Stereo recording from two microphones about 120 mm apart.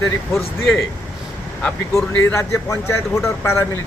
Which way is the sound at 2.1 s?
25° left (ahead or behind).